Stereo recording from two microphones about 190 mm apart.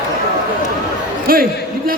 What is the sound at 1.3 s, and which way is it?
Speech, 50° right (ahead or behind).